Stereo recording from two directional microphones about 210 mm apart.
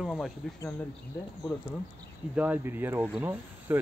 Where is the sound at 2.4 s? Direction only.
10° right (ahead or behind).